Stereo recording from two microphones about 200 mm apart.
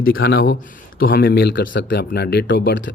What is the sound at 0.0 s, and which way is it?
Speech, 50° left (ahead or behind).